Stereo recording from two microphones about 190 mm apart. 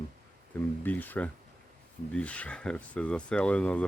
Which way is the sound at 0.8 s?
10° left (ahead or behind).